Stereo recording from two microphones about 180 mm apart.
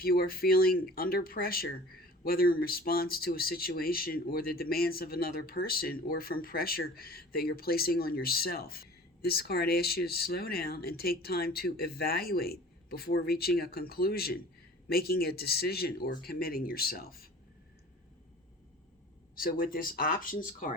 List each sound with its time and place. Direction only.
0.0 s speech: 55° left (ahead or behind)
19.4 s speech: 55° left (ahead or behind)